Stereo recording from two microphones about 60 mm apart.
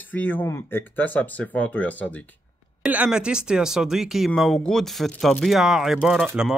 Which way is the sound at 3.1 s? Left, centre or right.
Centre.